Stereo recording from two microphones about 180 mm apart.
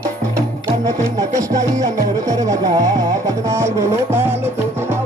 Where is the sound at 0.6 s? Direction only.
20° right (ahead or behind).